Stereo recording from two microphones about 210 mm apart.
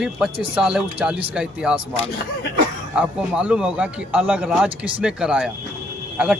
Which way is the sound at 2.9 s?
5° right (ahead or behind).